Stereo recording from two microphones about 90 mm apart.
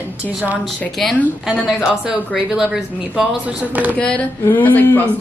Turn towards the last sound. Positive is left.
turn(degrees=20)  # may be behind; listen again after turning